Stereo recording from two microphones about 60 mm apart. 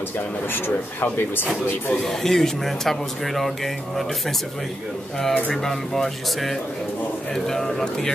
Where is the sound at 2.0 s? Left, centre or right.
Centre.